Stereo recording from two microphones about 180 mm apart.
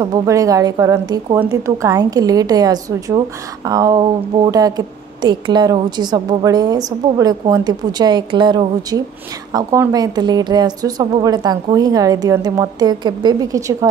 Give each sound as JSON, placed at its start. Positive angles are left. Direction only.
{"t": 0.0, "sound": "a woman's voice", "side_deg": -20}